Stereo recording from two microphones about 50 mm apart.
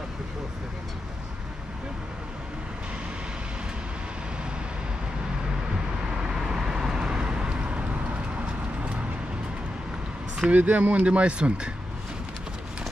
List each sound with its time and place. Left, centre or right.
6.2 s vehicle: centre; by 8.9 s right
10.5 s speech: right